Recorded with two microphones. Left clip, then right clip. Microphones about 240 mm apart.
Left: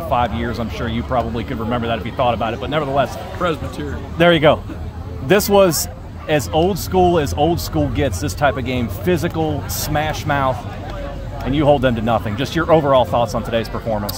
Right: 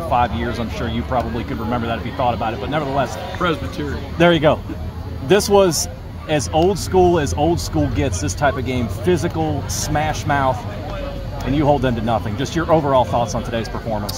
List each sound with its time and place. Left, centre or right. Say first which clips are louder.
0.1 s speech: even; left
4.2 s speech: left 2 dB; left
11.5 s speech: left 3 dB; left